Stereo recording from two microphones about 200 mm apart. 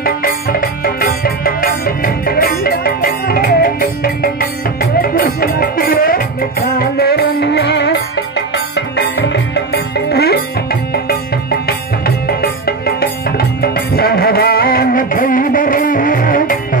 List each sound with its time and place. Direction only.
0.0 s music: 45° left (ahead or behind)
12.3 s music: 50° left (ahead or behind)